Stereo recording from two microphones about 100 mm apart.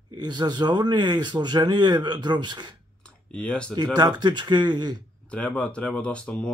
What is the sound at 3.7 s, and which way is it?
Speech, 45° right (ahead or behind).